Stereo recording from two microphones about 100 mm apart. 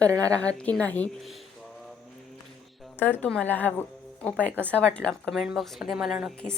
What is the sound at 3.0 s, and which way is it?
Speech, 20° left (ahead or behind).